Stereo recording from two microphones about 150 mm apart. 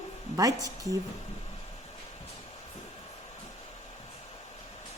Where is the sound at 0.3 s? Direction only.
25° right (ahead or behind).